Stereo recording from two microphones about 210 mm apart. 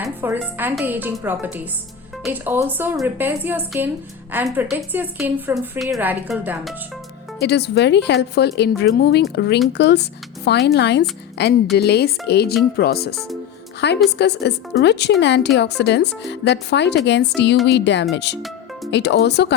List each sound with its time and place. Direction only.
0.0 s a woman's voice: 10° right (ahead or behind)
7.3 s speech: 50° left (ahead or behind)